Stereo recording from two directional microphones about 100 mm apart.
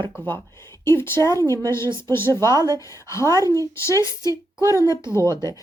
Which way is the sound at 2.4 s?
40° right (ahead or behind).